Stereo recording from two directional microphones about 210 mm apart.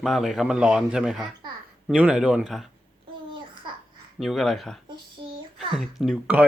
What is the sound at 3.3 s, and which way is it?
Babbling, 25° right (ahead or behind).